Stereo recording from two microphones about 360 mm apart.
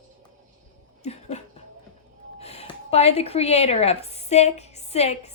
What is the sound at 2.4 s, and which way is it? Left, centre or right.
A woman's voice, centre.